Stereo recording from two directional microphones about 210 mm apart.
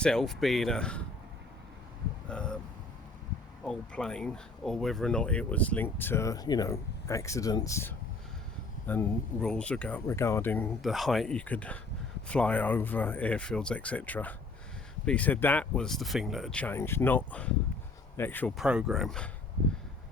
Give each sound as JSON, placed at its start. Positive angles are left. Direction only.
{"t": 0.0, "sound": "speech", "side_deg": 5}
{"t": 2.2, "sound": "a sound", "side_deg": 5}
{"t": 3.6, "sound": "speech", "side_deg": 5}